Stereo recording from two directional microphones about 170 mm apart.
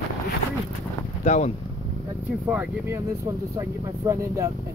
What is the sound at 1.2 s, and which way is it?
Speech, 45° left (ahead or behind).